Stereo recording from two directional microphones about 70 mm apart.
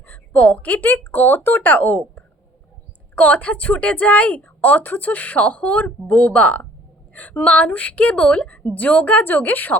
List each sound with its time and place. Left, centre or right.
0.0 s a woman's voice: left